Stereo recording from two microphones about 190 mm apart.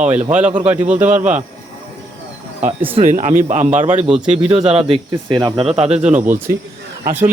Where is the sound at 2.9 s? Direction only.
35° right (ahead or behind).